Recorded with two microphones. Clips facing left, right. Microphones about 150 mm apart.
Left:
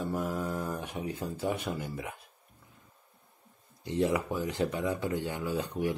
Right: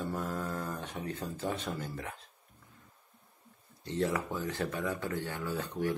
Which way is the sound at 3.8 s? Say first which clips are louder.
Left 3 dB; 15° left (ahead or behind).